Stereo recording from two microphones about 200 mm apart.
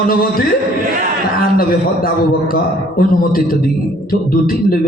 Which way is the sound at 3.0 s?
45° left (ahead or behind).